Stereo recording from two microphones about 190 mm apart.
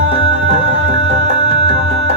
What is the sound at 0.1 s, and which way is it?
Music, 35° right (ahead or behind).